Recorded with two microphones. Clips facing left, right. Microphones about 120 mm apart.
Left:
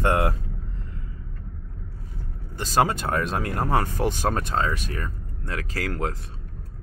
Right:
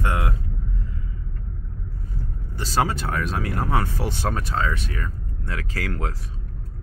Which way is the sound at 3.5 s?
40° left (ahead or behind).